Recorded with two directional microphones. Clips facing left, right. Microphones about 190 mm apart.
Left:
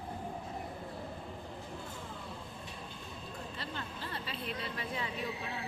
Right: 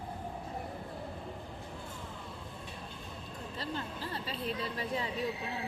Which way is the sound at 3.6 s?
35° right (ahead or behind).